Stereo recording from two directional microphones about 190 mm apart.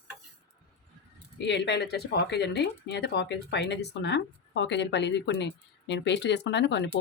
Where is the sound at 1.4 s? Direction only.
70° left (ahead or behind).